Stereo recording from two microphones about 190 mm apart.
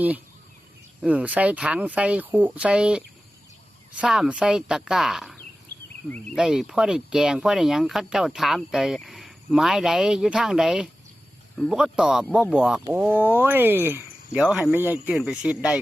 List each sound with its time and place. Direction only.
1.0 s speech: 5° right (ahead or behind)